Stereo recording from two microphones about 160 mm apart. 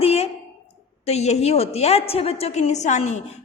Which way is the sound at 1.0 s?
40° left (ahead or behind).